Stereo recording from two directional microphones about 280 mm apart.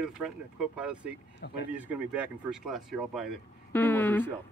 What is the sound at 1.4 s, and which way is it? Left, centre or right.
Speech, left.